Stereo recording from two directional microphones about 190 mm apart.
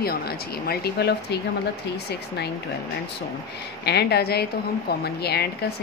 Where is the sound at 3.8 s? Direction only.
60° left (ahead or behind).